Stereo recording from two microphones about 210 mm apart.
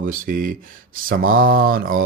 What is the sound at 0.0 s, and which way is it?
Speech, 40° right (ahead or behind).